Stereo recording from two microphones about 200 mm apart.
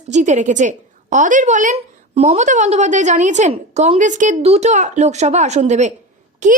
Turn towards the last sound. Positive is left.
turn(degrees=-35)  # may be behind; listen again after turning